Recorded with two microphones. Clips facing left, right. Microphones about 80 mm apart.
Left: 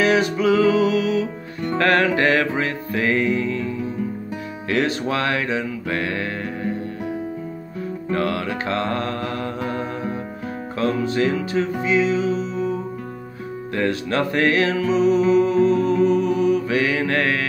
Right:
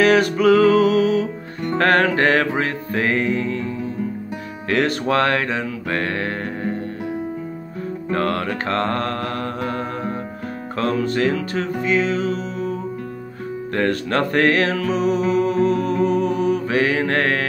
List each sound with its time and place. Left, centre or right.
0.0 s music: right
8.1 s mantra: right
10.8 s music: right
13.7 s music: right